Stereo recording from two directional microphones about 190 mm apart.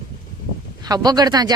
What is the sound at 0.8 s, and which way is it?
Speech, 20° right (ahead or behind).